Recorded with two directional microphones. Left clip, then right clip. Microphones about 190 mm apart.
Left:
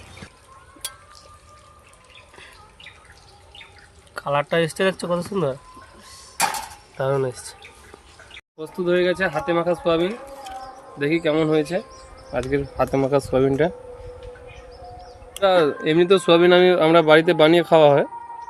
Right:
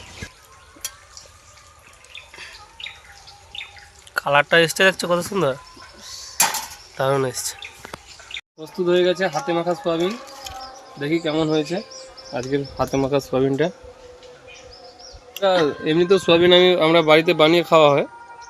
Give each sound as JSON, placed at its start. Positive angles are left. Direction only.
{"t": 4.1, "sound": "speech", "side_deg": 0}
{"t": 6.9, "sound": "speech", "side_deg": 0}
{"t": 8.6, "sound": "speech", "side_deg": 10}
{"t": 15.3, "sound": "a sound", "side_deg": 15}
{"t": 15.5, "sound": "speech", "side_deg": 5}